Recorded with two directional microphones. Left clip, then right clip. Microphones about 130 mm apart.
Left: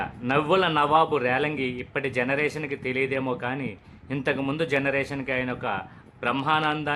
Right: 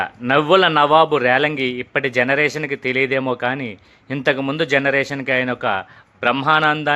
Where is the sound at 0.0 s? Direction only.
35° right (ahead or behind).